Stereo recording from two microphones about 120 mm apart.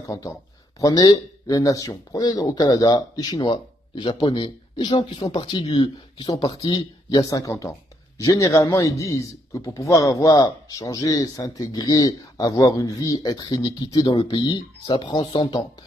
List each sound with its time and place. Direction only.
0.0 s a man's voice: 30° left (ahead or behind)